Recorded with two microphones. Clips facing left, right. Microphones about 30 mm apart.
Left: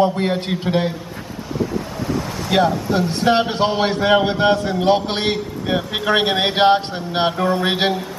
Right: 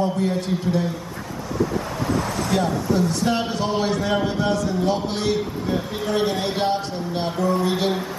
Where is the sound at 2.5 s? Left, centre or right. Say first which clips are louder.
Left 5 dB; left.